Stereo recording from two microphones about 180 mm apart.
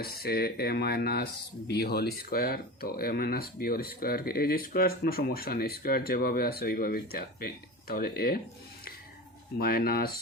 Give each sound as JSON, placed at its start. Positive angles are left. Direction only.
{"t": 0.0, "sound": "speech", "side_deg": 60}
{"t": 9.6, "sound": "speech", "side_deg": 60}